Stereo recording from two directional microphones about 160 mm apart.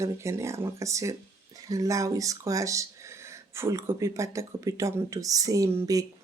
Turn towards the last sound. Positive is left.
turn(degrees=-20)  # may be behind; listen again after turning